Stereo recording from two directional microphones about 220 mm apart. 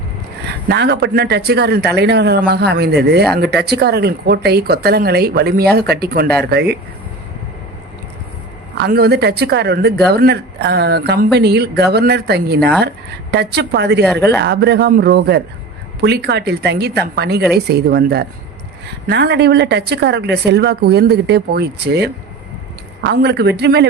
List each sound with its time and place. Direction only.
0.7 s speech: 50° right (ahead or behind)
8.8 s speech: 45° right (ahead or behind)
14.0 s speech: 5° left (ahead or behind)
14.3 s speech: 50° right (ahead or behind)